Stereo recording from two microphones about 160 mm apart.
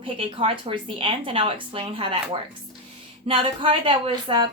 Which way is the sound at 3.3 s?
30° right (ahead or behind).